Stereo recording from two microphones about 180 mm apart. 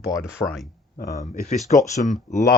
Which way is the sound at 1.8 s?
40° left (ahead or behind).